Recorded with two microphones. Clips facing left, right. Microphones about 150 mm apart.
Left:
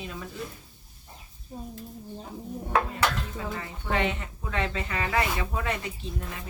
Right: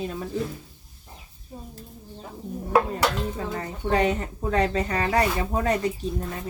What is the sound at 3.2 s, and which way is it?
Speech, 35° right (ahead or behind).